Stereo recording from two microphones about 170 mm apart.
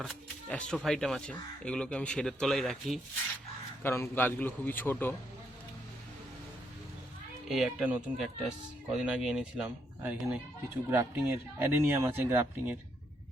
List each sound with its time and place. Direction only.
0.0 s speech: centre (ahead or behind)
3.8 s a man's voice: 15° left (ahead or behind)
7.4 s speech: centre (ahead or behind)